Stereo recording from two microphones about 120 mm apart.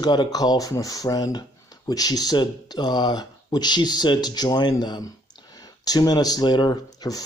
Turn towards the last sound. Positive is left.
turn(degrees=30)  # may be behind; listen again after turning